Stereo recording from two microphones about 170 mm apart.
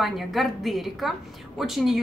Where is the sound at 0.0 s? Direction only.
Centre (ahead or behind).